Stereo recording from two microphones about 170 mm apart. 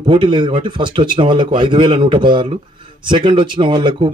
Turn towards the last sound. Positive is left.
turn(degrees=-30)  # may be behind; listen again after turning